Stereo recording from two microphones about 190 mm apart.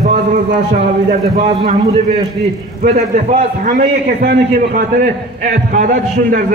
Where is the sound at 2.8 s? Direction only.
40° right (ahead or behind).